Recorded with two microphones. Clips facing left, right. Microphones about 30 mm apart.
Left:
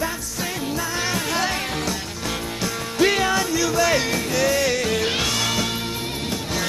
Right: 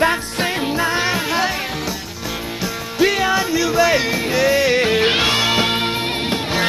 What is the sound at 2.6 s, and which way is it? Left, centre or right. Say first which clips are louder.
Music: right 2 dB; centre.